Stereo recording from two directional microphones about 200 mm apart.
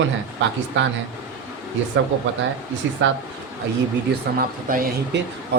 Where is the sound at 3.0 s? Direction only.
70° right (ahead or behind).